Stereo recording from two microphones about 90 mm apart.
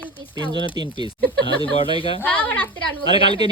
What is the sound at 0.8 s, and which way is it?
Speech, 50° right (ahead or behind).